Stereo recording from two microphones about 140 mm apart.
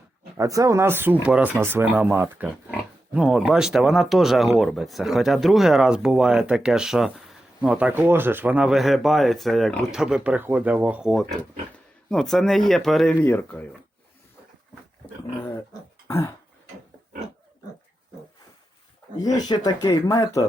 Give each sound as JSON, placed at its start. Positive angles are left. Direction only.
{"t": 0.3, "sound": "speech", "side_deg": -25}
{"t": 19.2, "sound": "speech", "side_deg": 25}